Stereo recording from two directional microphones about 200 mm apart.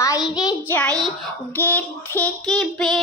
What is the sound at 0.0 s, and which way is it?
Child singing, 20° left (ahead or behind).